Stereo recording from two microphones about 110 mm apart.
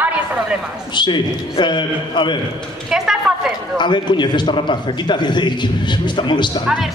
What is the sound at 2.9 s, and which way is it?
Speech, 5° right (ahead or behind).